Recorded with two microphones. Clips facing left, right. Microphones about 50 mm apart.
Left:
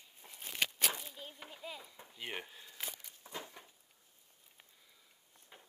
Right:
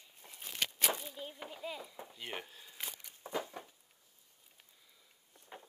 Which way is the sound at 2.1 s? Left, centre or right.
Centre.